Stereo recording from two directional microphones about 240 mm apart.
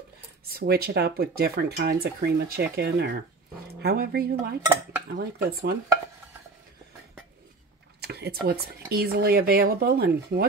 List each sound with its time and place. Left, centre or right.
0.5 s speech: right
8.0 s speech: right